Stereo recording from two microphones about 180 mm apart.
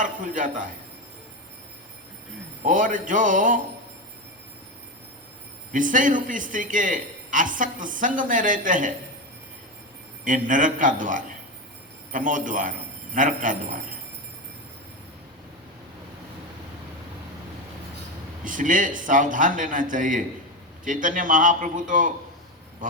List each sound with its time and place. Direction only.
0.0 s a man's voice: 45° right (ahead or behind)
2.6 s a man's voice: 45° right (ahead or behind)
5.7 s a man's voice: 45° right (ahead or behind)
10.2 s a man's voice: 45° right (ahead or behind)
18.4 s a man's voice: 45° right (ahead or behind)